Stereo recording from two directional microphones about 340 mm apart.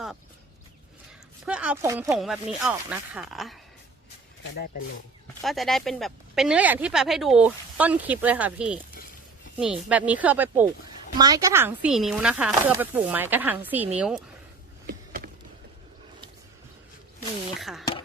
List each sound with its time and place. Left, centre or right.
1.5 s speech: centre
5.4 s speech: centre
14.8 s a sound: right
17.2 s speech: centre